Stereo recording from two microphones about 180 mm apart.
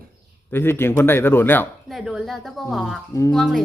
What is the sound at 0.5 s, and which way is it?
Speech, 10° left (ahead or behind).